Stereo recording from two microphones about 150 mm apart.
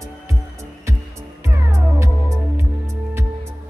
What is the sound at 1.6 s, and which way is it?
Music, 20° right (ahead or behind).